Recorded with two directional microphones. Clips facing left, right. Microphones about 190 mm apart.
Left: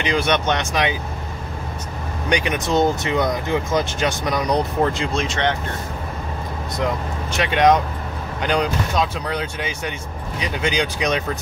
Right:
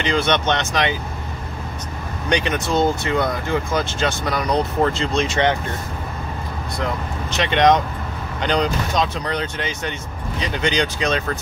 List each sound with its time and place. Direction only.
0.0 s speech: 10° left (ahead or behind)
2.2 s speech: 10° left (ahead or behind)
5.2 s speech: 5° right (ahead or behind)
7.3 s speech: 5° left (ahead or behind)